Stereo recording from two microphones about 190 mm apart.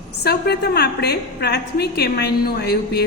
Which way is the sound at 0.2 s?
60° left (ahead or behind).